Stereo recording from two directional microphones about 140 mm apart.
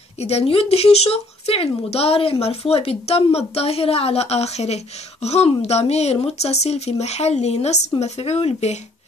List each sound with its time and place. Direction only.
0.2 s speech: 45° left (ahead or behind)